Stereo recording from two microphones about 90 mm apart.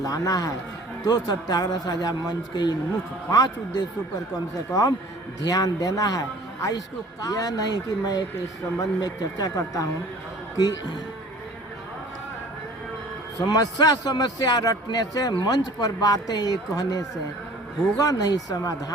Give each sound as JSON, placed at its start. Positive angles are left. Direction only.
{"t": 0.0, "sound": "a man's voice", "side_deg": 40}
{"t": 13.4, "sound": "a man's voice", "side_deg": 50}